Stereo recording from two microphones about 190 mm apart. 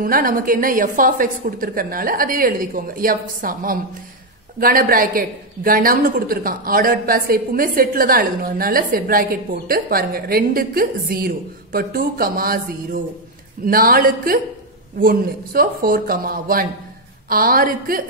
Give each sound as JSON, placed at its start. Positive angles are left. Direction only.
{"t": 0.0, "sound": "a woman's voice", "side_deg": -45}